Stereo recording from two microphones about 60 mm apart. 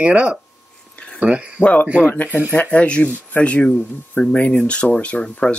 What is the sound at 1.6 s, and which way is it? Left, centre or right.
Speech, left.